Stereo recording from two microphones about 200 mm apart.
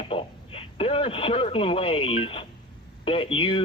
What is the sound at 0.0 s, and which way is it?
Speech, 30° left (ahead or behind).